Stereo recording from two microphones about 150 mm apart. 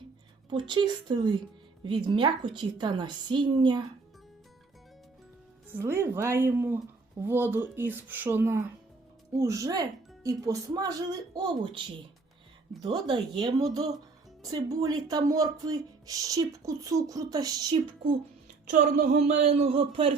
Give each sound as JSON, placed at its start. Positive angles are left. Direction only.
{"t": 0.5, "sound": "a woman's voice", "side_deg": -30}
{"t": 5.6, "sound": "a woman's voice", "side_deg": -15}
{"t": 12.8, "sound": "speech", "side_deg": -30}
{"t": 18.0, "sound": "speech", "side_deg": -55}